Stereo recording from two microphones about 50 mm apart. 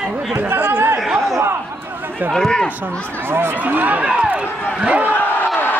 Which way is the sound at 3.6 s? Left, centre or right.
Right.